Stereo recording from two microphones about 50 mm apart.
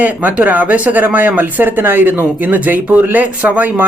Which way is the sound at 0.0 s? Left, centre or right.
Right.